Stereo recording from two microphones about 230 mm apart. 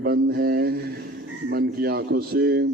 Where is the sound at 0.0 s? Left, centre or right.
Right.